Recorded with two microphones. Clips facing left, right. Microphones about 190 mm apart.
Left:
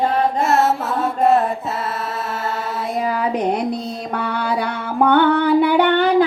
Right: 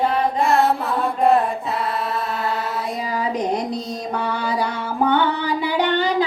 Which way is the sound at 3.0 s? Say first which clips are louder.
Left 4 dB; 60° left (ahead or behind).